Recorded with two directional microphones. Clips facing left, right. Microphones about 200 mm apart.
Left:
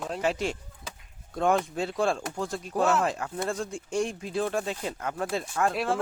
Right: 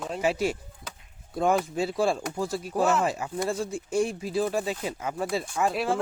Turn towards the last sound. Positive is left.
turn(degrees=0)  # may be behind; listen again after turning